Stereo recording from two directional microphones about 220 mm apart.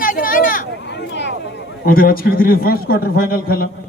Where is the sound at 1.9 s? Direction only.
40° left (ahead or behind).